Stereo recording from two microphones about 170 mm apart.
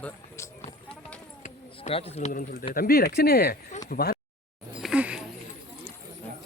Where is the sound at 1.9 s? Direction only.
35° left (ahead or behind).